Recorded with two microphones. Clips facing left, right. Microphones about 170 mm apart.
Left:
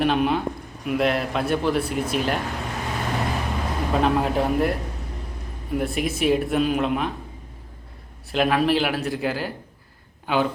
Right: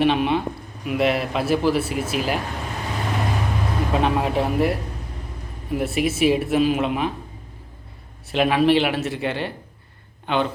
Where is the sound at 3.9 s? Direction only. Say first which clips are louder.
Left 1 dB; centre (ahead or behind).